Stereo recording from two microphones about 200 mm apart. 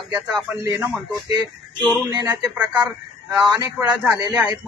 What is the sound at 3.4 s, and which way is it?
A man's voice, 20° right (ahead or behind).